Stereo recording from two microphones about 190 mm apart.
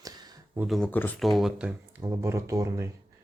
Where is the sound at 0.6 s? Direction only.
Centre (ahead or behind); by 2.8 s 15° right (ahead or behind).